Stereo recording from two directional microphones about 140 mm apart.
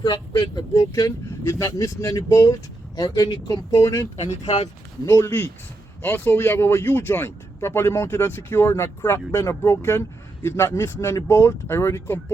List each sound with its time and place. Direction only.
0.0 s speech: 30° left (ahead or behind)
4.4 s speech: 50° left (ahead or behind)
5.0 s speech: 15° left (ahead or behind)